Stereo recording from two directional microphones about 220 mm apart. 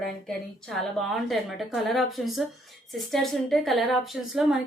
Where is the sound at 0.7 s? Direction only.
Centre (ahead or behind).